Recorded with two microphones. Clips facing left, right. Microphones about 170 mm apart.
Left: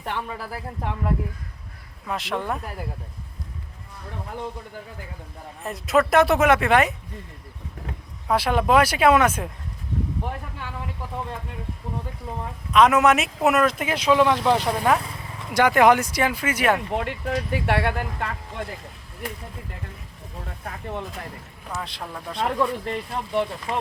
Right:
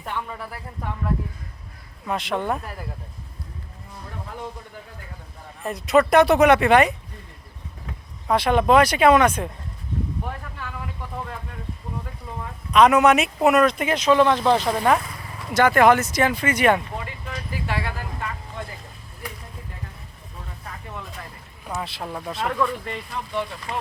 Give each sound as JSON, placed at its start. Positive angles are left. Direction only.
{"t": 2.0, "sound": "speech", "side_deg": 0}
{"t": 5.6, "sound": "speech", "side_deg": 0}
{"t": 8.3, "sound": "speech", "side_deg": 5}
{"t": 12.7, "sound": "speech", "side_deg": 0}
{"t": 16.9, "sound": "speech", "side_deg": 70}
{"t": 21.8, "sound": "speech", "side_deg": -5}
{"t": 22.4, "sound": "speech", "side_deg": 25}